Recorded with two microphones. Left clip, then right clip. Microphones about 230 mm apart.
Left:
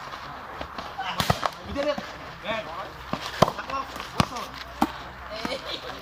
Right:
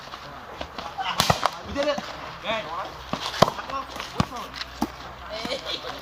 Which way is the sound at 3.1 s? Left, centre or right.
Centre.